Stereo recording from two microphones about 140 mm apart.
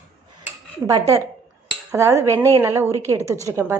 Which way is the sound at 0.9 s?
25° right (ahead or behind).